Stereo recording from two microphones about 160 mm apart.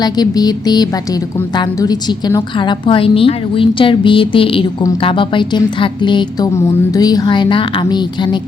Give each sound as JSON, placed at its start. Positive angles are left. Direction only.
{"t": 0.0, "sound": "a woman's voice", "side_deg": 25}